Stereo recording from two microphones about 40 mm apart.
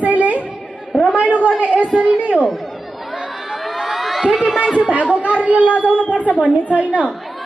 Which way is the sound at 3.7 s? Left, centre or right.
Centre.